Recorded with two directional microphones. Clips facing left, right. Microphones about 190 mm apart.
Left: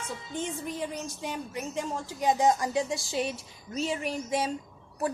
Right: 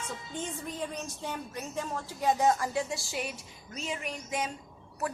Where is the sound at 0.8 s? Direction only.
10° left (ahead or behind).